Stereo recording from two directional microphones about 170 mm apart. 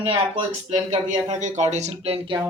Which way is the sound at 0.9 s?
45° right (ahead or behind).